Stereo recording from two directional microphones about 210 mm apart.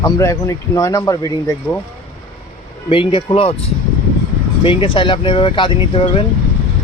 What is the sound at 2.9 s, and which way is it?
Speech, 25° left (ahead or behind).